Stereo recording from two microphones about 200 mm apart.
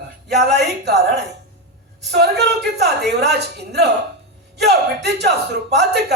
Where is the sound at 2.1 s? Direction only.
55° right (ahead or behind).